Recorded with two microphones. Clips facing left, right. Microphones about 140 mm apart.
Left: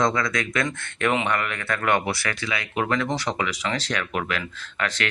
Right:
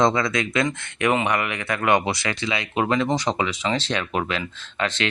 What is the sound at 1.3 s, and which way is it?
Speech, 15° right (ahead or behind).